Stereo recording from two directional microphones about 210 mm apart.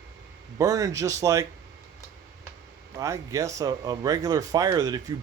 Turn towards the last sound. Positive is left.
turn(degrees=-20)  # may be behind; listen again after turning